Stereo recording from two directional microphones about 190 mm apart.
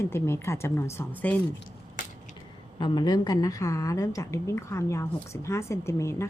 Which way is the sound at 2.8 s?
25° left (ahead or behind).